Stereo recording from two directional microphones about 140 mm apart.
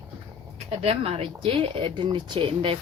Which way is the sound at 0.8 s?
45° right (ahead or behind).